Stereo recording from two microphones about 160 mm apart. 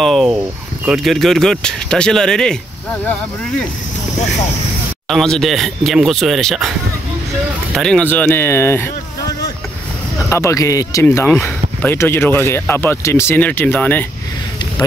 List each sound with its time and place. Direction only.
0.0 s speech: centre (ahead or behind)
5.1 s speech: centre (ahead or behind)
7.7 s speech: 5° left (ahead or behind)
10.3 s speech: 20° left (ahead or behind)